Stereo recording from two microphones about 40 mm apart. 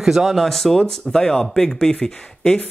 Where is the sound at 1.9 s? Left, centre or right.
Left.